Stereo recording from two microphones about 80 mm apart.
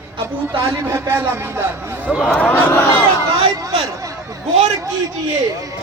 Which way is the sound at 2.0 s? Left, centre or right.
Centre.